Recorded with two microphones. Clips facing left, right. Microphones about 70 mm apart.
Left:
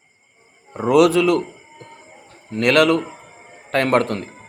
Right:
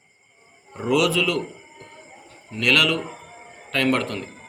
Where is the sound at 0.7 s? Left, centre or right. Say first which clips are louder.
Left 7 dB; left.